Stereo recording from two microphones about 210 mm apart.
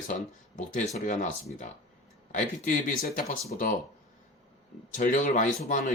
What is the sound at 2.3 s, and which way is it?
Speech, 40° left (ahead or behind).